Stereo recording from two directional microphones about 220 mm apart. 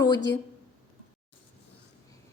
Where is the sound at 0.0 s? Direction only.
15° left (ahead or behind).